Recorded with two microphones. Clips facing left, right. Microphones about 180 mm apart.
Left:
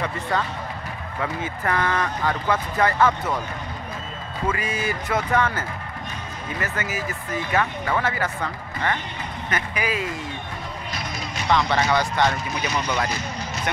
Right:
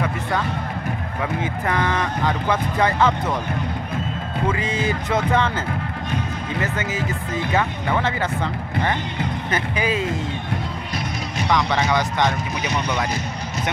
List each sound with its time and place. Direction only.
1.2 s speech: 15° right (ahead or behind)
4.5 s speech: 20° right (ahead or behind)
6.6 s speech: 20° right (ahead or behind)
9.5 s speech: 25° right (ahead or behind)
11.5 s speech: 15° right (ahead or behind)